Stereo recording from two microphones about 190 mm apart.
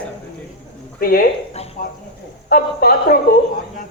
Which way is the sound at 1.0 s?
50° left (ahead or behind).